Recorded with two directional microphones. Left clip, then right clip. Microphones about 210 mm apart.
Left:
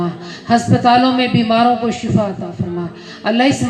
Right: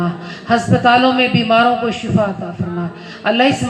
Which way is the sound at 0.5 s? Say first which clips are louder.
Even; 25° left (ahead or behind).